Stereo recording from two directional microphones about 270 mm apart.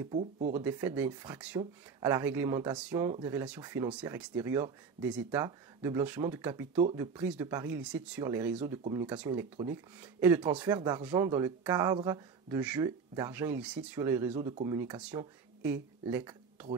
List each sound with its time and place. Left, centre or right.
0.1 s speech: right
0.6 s speech: centre